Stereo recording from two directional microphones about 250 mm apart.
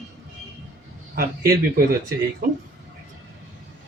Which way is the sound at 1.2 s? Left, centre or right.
Right.